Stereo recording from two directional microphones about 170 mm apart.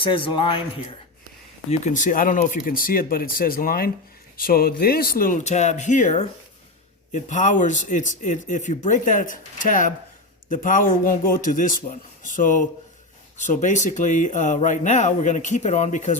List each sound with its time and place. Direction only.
0.0 s speech: 30° left (ahead or behind)
1.7 s a man's voice: 45° left (ahead or behind)